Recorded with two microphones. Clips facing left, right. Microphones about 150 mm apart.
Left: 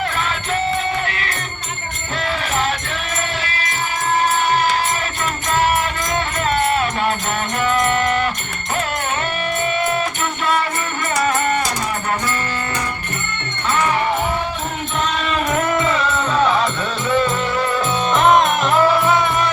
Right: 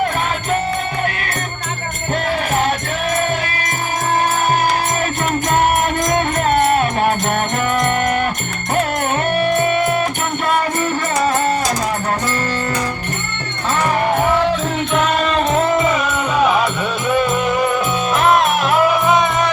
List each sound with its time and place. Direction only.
6.1 s music: 50° right (ahead or behind)
9.4 s music: 55° right (ahead or behind)
14.9 s music: 60° right (ahead or behind)
15.2 s music: 35° right (ahead or behind); by 19.5 s 20° right (ahead or behind)